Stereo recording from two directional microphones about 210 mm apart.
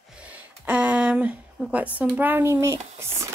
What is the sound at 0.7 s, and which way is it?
A woman's voice, 5° right (ahead or behind).